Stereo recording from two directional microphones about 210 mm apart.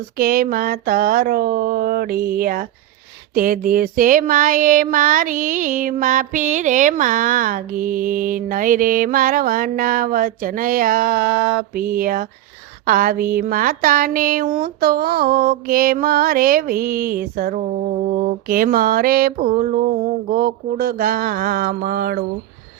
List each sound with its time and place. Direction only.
0.2 s speech: 45° right (ahead or behind)
3.3 s a sound: 40° right (ahead or behind)
11.7 s speech: 45° right (ahead or behind)